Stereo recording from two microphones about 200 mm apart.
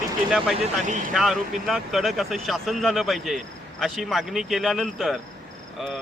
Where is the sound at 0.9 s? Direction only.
40° right (ahead or behind).